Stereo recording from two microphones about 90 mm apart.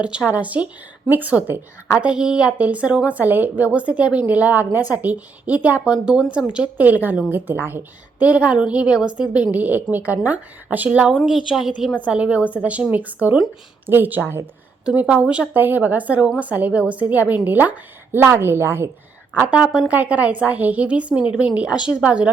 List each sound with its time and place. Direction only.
0.0 s a woman's voice: 15° right (ahead or behind)
19.5 s a woman's voice: 15° right (ahead or behind)